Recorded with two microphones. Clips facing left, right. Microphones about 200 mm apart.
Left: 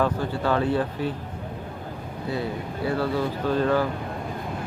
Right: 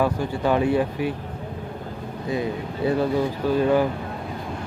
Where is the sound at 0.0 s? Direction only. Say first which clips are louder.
Right 2 dB; 15° right (ahead or behind).